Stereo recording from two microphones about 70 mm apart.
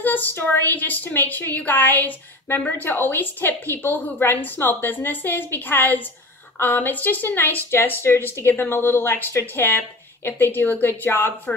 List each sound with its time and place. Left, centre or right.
0.0 s a woman's voice: left